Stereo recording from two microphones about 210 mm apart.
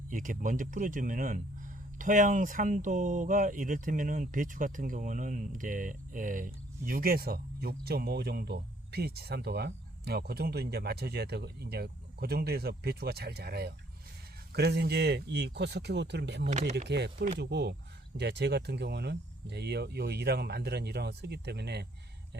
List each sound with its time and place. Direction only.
0.1 s speech: 40° right (ahead or behind); by 16.4 s 55° right (ahead or behind)
16.4 s speech: 35° right (ahead or behind)
16.9 s speech: 55° right (ahead or behind)